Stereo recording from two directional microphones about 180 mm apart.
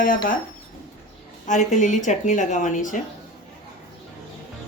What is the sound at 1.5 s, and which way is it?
A woman's voice, 45° left (ahead or behind).